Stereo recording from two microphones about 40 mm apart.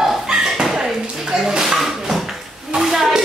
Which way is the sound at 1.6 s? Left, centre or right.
Centre.